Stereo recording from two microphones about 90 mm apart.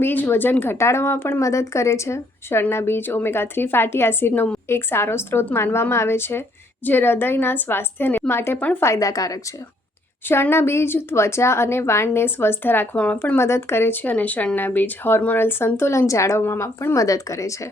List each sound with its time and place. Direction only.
0.0 s a woman's voice: 20° left (ahead or behind)
8.5 s speech: 15° left (ahead or behind)
8.8 s a woman's voice: 35° left (ahead or behind)
10.2 s a woman's voice: 25° left (ahead or behind)